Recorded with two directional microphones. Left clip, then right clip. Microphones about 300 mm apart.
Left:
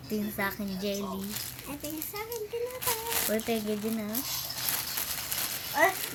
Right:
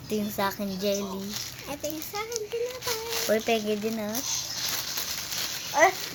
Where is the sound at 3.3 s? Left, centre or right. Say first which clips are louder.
Right 8 dB; centre.